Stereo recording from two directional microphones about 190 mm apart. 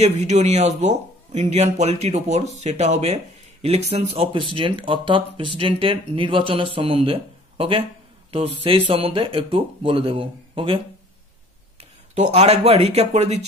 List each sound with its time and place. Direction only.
0.0 s a man's voice: 35° right (ahead or behind)
12.2 s a man's voice: 35° right (ahead or behind)